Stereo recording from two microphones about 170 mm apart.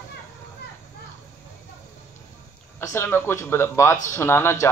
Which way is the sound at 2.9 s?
15° left (ahead or behind).